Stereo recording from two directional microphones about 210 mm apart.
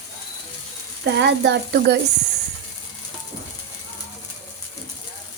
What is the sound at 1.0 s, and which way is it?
Speech, 55° right (ahead or behind).